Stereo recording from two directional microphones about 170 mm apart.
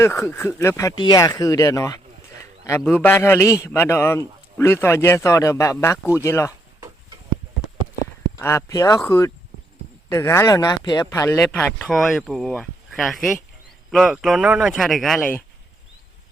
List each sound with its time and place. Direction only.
0.0 s a man's voice: 15° left (ahead or behind)
8.4 s a man's voice: 15° left (ahead or behind)